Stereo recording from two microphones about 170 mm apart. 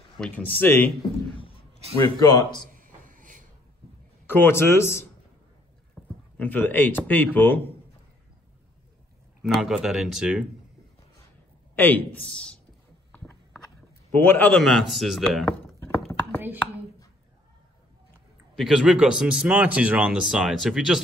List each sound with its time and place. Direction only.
0.2 s a man's voice: 10° left (ahead or behind)
2.0 s a man's voice: 20° left (ahead or behind)
2.7 s a sound: 50° right (ahead or behind)
4.3 s a man's voice: 15° left (ahead or behind)
6.0 s a sound: centre (ahead or behind)
6.3 s a man's voice: 10° left (ahead or behind)
9.4 s speech: centre (ahead or behind)
11.7 s a man's voice: 10° left (ahead or behind)
14.1 s speech: 10° left (ahead or behind)
18.6 s speech: centre (ahead or behind)